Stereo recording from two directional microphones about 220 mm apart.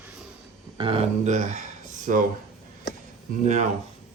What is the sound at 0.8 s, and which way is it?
Speech, 25° right (ahead or behind).